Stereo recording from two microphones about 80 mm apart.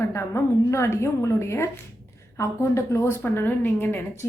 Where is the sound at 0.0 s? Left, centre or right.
Left.